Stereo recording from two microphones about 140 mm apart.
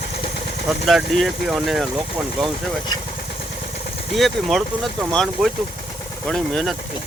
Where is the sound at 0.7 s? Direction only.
Centre (ahead or behind).